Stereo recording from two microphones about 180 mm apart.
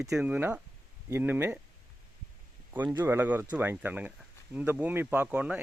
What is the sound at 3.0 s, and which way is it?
Speech, 10° right (ahead or behind).